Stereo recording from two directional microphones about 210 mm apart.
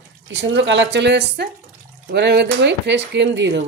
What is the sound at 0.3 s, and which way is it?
Speech, 60° right (ahead or behind).